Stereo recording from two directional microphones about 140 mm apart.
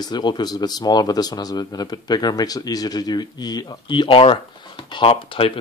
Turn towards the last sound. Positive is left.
turn(degrees=40)  # may be behind; listen again after turning